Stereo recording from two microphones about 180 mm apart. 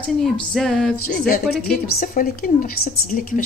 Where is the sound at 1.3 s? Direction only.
55° left (ahead or behind).